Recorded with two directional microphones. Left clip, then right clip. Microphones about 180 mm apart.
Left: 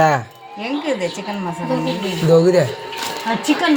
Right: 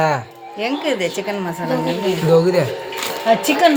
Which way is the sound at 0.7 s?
50° right (ahead or behind).